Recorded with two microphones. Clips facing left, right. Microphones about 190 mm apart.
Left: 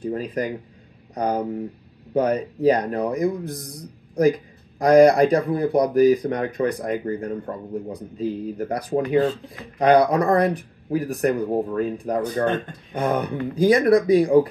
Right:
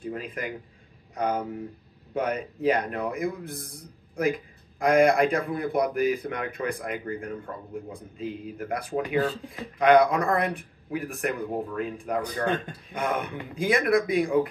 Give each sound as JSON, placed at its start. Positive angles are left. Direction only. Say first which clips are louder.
{"t": 0.0, "sound": "speech", "louder": "left 8 dB", "side_deg": 40}